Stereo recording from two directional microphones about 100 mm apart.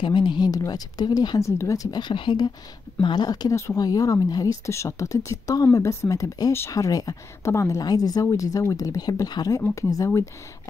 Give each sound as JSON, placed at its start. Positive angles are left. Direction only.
{"t": 0.0, "sound": "speech", "side_deg": 50}
{"t": 0.5, "sound": "speech", "side_deg": 40}
{"t": 1.4, "sound": "speech", "side_deg": 30}